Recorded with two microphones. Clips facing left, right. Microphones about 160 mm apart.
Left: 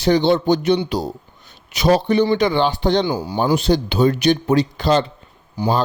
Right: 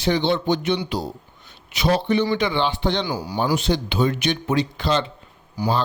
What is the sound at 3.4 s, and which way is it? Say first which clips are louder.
Speech: left 5 dB; 35° left (ahead or behind).